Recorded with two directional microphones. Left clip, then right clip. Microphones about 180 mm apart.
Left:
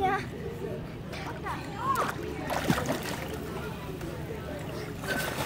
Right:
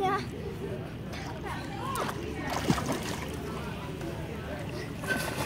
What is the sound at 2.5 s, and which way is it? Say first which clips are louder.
Boat: left 2 dB; 15° left (ahead or behind).